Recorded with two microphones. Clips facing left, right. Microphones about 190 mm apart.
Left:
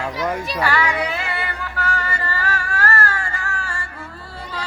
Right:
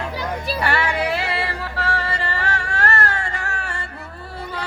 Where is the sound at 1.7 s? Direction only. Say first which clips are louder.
Left 1 dB; 30° right (ahead or behind).